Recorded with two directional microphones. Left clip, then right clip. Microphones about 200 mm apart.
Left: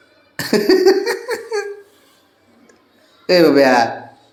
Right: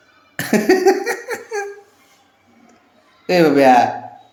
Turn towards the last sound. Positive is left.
turn(degrees=-10)  # may be behind; listen again after turning